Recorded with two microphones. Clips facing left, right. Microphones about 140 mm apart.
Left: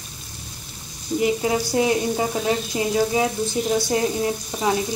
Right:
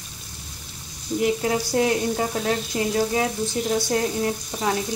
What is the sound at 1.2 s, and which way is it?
Speech, 5° left (ahead or behind).